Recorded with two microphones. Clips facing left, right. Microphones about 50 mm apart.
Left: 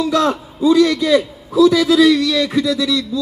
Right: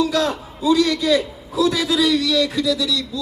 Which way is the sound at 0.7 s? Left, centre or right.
Centre.